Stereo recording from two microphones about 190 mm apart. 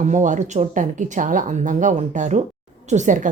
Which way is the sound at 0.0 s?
40° right (ahead or behind).